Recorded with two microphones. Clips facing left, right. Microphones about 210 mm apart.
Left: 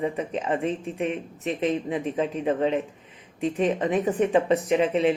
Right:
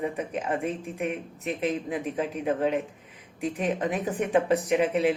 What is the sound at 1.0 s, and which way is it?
Speech, 30° left (ahead or behind).